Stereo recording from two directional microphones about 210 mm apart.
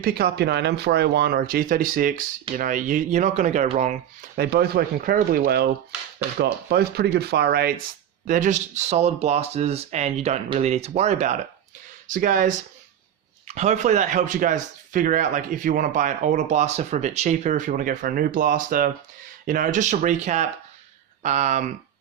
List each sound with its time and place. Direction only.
0.0 s speech: 50° right (ahead or behind)
4.4 s speech: 50° right (ahead or behind)
8.3 s speech: 35° right (ahead or behind)